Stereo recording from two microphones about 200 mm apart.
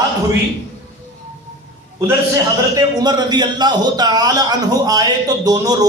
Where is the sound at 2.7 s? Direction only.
20° right (ahead or behind).